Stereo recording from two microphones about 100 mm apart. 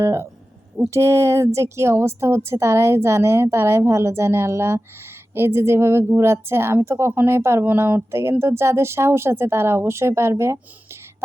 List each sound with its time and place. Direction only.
0.0 s a woman's voice: 25° right (ahead or behind)